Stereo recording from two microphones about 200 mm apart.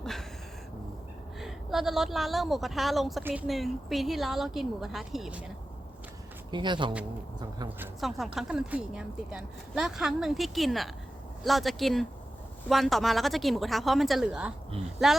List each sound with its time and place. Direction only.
0.0 s a sound: centre (ahead or behind)
1.4 s a woman's voice: centre (ahead or behind)
6.5 s speech: 25° right (ahead or behind)
8.0 s speech: centre (ahead or behind)